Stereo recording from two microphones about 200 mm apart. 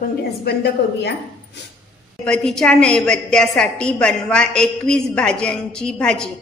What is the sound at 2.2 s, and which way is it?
A woman's voice, 5° left (ahead or behind).